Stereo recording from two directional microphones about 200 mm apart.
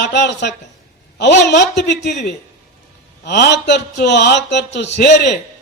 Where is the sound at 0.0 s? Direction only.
60° left (ahead or behind).